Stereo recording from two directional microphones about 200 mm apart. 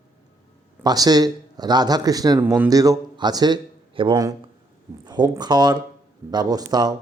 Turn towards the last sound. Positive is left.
turn(degrees=-20)  # may be behind; listen again after turning